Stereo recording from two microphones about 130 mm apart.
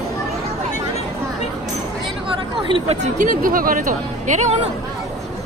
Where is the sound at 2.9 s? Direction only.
80° right.